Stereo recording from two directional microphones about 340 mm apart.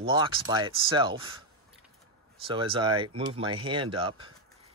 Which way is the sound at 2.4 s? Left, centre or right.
Centre.